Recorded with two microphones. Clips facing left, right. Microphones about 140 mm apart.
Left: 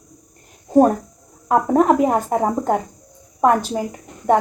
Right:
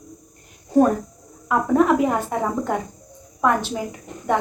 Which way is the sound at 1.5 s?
40° left (ahead or behind).